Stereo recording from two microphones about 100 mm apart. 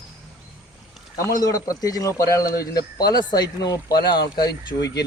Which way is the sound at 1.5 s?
35° left (ahead or behind).